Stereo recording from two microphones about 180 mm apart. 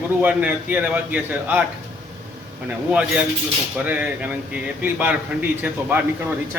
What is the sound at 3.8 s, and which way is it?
A man's voice, 10° right (ahead or behind).